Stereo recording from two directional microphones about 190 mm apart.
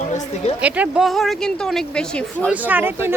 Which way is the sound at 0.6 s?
5° right (ahead or behind).